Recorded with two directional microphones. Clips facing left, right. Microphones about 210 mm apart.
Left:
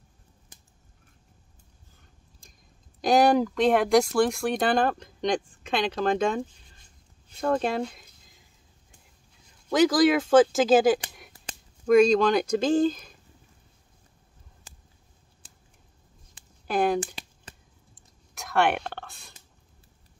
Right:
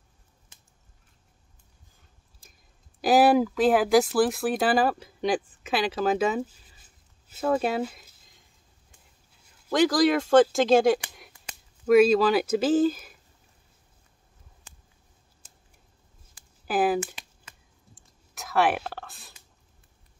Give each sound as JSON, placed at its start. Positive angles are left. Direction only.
{"t": 3.0, "sound": "speech", "side_deg": -5}
{"t": 16.6, "sound": "speech", "side_deg": -5}
{"t": 17.0, "sound": "shuffling cards", "side_deg": 35}
{"t": 17.9, "sound": "a sound", "side_deg": 0}